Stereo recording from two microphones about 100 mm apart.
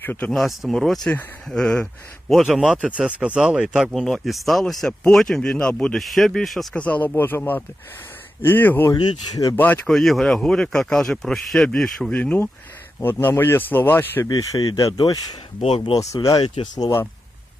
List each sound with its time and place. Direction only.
0.0 s speech: 20° left (ahead or behind)
0.3 s speech: centre (ahead or behind)
2.3 s speech: centre (ahead or behind)
2.8 s speech: 15° right (ahead or behind)
6.7 s speech: 15° left (ahead or behind)
9.9 s speech: 5° left (ahead or behind); by 14.3 s 20° left (ahead or behind)
14.3 s speech: 35° left (ahead or behind)